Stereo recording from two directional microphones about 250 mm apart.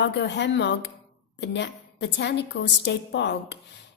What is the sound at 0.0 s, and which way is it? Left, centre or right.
Speech, left.